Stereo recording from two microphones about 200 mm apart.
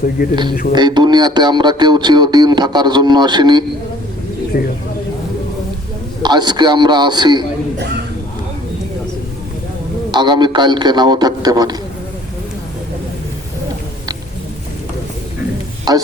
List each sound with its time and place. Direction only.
0.2 s speech: 45° left (ahead or behind)
0.7 s speech: 20° right (ahead or behind)
4.5 s speech: 45° left (ahead or behind)
6.2 s speech: 20° right (ahead or behind)
10.1 s speech: 20° right (ahead or behind)
15.9 s speech: 20° right (ahead or behind)